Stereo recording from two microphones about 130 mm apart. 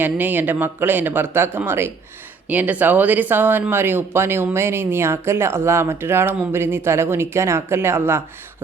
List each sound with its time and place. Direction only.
0.0 s speech: 15° right (ahead or behind)